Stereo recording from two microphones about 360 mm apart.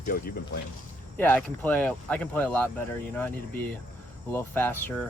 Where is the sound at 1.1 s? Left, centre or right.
Centre.